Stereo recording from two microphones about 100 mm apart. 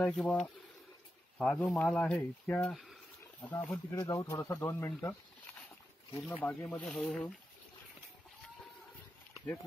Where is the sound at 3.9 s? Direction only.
35° left (ahead or behind).